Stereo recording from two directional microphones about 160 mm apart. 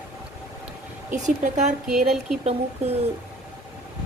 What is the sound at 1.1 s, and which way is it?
Speech, 45° right (ahead or behind).